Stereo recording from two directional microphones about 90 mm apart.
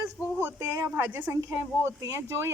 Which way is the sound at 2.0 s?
35° right (ahead or behind).